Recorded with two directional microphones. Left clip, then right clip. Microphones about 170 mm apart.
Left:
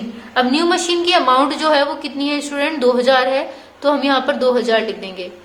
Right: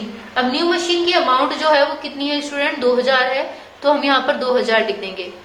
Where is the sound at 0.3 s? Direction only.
45° left (ahead or behind).